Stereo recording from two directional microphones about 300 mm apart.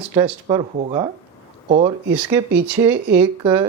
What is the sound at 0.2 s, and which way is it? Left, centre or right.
Speech, centre.